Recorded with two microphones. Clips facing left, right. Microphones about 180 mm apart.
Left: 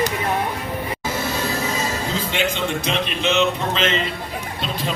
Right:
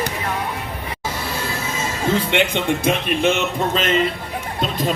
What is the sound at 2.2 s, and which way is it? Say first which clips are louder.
Speech: right 3 dB; 65° right (ahead or behind).